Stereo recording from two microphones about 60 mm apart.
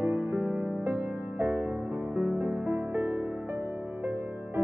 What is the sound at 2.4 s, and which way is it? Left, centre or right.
Music, right.